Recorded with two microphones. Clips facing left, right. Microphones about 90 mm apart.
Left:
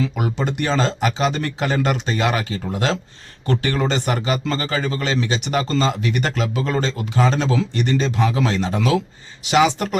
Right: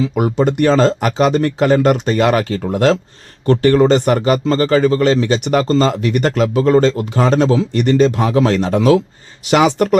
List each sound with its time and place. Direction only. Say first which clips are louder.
0.2 s speech: right 9 dB; 45° right (ahead or behind)